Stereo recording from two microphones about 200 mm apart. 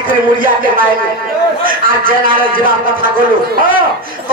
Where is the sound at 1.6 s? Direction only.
45° right (ahead or behind).